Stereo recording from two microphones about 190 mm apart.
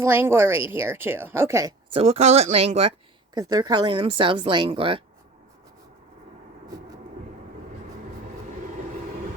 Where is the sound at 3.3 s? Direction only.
20° right (ahead or behind).